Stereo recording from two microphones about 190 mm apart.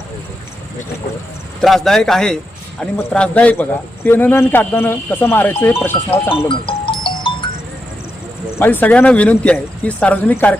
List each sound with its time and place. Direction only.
1.6 s speech: centre (ahead or behind)
6.5 s music: 25° left (ahead or behind)
8.5 s speech: 10° left (ahead or behind)